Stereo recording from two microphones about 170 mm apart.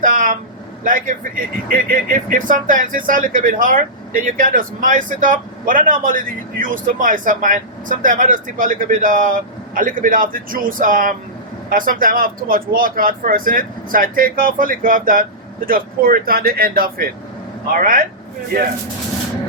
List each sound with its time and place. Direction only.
0.0 s speech: 55° right (ahead or behind)